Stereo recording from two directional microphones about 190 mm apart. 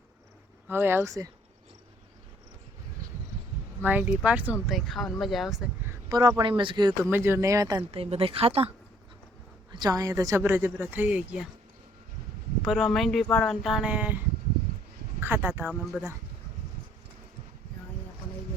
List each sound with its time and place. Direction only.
0.7 s speech: 10° right (ahead or behind)
3.8 s speech: 10° right (ahead or behind)
5.9 s speech: 20° right (ahead or behind)
7.9 s speech: 30° right (ahead or behind)
9.7 s speech: 20° right (ahead or behind)
12.6 s speech: centre (ahead or behind)
15.2 s speech: 10° right (ahead or behind)